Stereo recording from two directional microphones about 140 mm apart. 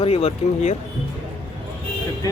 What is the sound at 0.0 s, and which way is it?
Speech, 45° left (ahead or behind).